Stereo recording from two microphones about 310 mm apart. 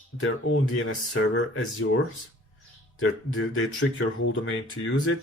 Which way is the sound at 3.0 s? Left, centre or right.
Left.